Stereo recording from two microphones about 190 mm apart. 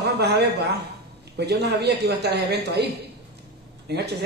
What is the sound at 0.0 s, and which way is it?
A man's voice, 60° right (ahead or behind).